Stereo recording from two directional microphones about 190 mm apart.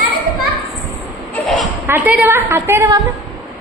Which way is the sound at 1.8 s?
10° right (ahead or behind).